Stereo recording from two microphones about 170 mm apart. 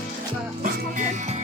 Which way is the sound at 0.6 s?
55° right (ahead or behind).